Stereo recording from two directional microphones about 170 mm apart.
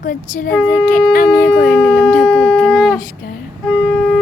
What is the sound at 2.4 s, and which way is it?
Shofar, 15° left (ahead or behind).